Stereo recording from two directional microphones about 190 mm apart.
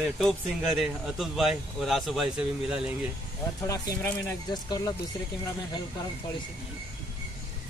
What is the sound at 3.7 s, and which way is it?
Speech, 15° left (ahead or behind).